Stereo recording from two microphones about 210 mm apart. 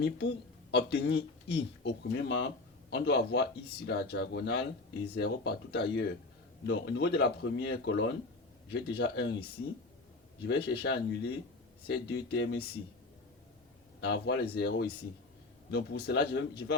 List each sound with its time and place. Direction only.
0.0 s speech: 55° left (ahead or behind)
10.7 s speech: 50° left (ahead or behind)
14.0 s speech: 55° left (ahead or behind)